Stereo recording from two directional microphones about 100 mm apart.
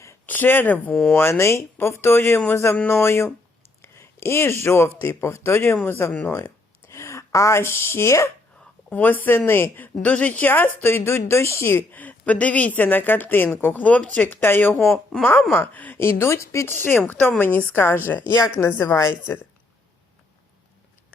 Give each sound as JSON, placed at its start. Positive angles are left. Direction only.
{"t": 0.3, "sound": "a woman's voice", "side_deg": 20}
{"t": 8.9, "sound": "a woman's voice", "side_deg": 15}
{"t": 14.8, "sound": "speech", "side_deg": 5}
{"t": 15.3, "sound": "a woman's voice", "side_deg": 20}
{"t": 16.7, "sound": "a woman's voice", "side_deg": 20}